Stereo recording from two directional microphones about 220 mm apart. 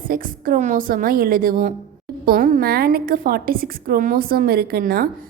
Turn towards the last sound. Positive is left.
turn(degrees=-40)  # may be behind; listen again after turning